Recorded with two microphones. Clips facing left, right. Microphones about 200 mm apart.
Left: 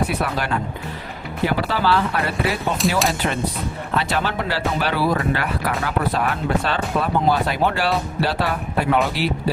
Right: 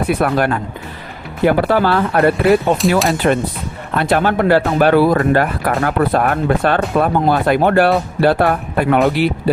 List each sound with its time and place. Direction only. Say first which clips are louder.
0.1 s speech: right 8 dB; 50° right (ahead or behind)
2.8 s speech: right 6 dB; centre (ahead or behind)
3.2 s speech: right 7 dB; 55° right (ahead or behind)